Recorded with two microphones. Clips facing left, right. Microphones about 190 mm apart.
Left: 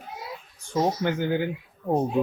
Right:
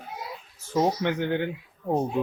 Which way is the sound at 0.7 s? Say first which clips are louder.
Even; centre (ahead or behind).